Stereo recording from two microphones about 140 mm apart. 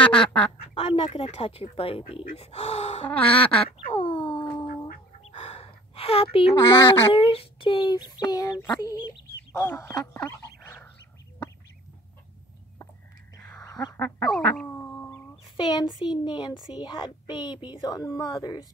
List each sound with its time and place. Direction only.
0.0 s quack: 5° left (ahead or behind)
0.7 s speech: 40° left (ahead or behind)
3.1 s quack: 10° left (ahead or behind)
3.6 s speech: 40° left (ahead or behind)
5.3 s a sound: 45° left (ahead or behind)
6.7 s speech: 40° left (ahead or behind)
10.6 s bird: 15° left (ahead or behind)
13.7 s duck: 25° left (ahead or behind)
14.3 s cat: 10° left (ahead or behind)
15.4 s speech: 30° left (ahead or behind)